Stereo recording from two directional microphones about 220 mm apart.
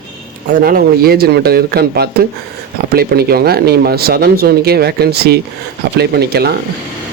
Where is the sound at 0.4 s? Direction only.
40° right (ahead or behind).